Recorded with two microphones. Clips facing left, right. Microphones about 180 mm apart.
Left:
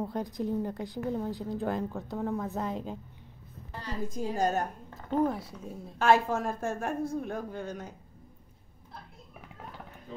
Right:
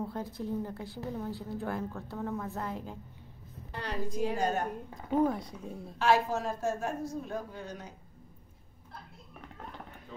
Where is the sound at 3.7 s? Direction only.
65° right (ahead or behind).